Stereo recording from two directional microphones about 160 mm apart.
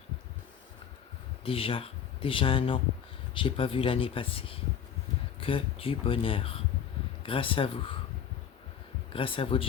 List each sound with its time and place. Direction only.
1.5 s speech: 35° left (ahead or behind)
9.1 s speech: 35° left (ahead or behind)